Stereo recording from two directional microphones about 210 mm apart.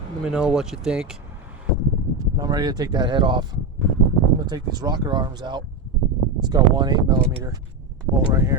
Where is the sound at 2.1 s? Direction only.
20° right (ahead or behind).